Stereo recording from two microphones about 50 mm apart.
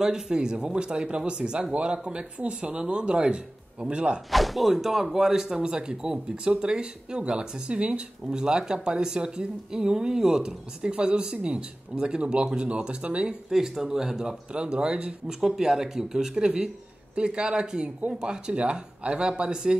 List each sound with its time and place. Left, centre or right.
0.0 s speech: centre
4.3 s speech: centre